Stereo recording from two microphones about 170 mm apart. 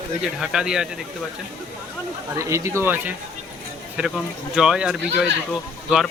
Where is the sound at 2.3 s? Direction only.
15° right (ahead or behind).